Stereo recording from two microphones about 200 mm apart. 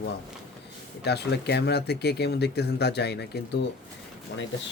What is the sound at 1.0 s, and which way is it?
Speech, 55° left (ahead or behind).